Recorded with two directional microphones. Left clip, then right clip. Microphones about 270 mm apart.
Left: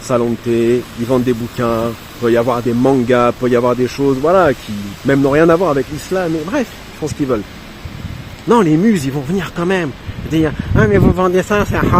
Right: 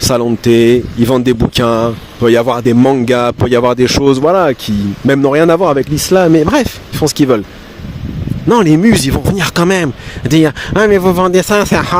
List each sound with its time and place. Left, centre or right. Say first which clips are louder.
0.1 s speech: right 2 dB; right
8.4 s speech: right 3 dB; right